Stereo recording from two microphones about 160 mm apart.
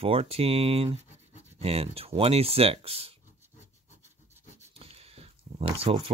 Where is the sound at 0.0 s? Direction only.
35° right (ahead or behind).